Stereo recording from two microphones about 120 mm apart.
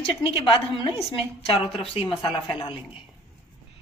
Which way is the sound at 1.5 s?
45° left (ahead or behind).